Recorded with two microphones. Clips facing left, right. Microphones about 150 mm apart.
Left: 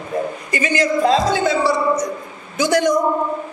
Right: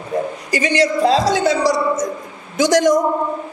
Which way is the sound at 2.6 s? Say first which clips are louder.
Right 3 dB; 90° right.